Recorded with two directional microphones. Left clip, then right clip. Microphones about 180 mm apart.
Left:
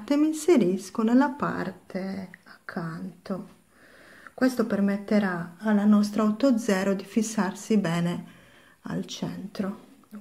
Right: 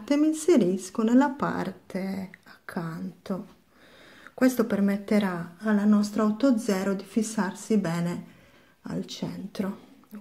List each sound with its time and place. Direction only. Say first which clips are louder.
0.0 s speech: even; centre (ahead or behind); by 3.3 s 20° right (ahead or behind)
4.6 s speech: even; 15° right (ahead or behind); by 9.4 s 5° left (ahead or behind)
9.5 s speech: right 1 dB; 10° right (ahead or behind)